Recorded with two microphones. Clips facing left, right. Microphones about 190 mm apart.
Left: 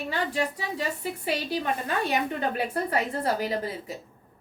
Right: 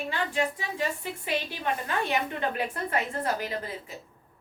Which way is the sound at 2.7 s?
35° left (ahead or behind).